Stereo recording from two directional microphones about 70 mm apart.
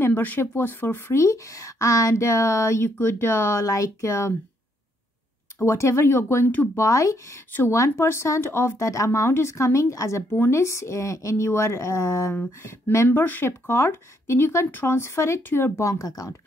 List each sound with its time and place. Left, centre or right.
0.0 s speech: left
5.6 s speech: left
6.8 s speech: left
15.8 s speech: left